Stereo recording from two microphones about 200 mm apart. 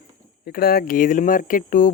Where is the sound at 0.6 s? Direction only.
45° left (ahead or behind).